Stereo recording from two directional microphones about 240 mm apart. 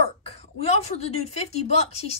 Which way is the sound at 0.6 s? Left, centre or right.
Left.